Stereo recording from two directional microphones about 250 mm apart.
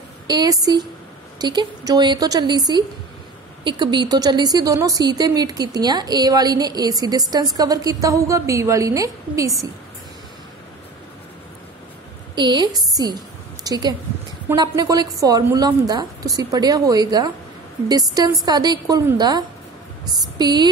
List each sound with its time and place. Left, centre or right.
0.3 s a woman's voice: centre
12.4 s a woman's voice: centre